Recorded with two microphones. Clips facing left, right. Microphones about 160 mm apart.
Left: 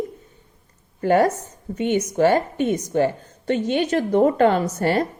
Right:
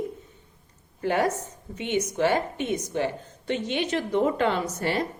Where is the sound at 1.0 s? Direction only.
40° left (ahead or behind).